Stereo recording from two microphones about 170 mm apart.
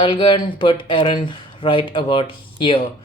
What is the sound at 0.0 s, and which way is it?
Speech, 30° left (ahead or behind).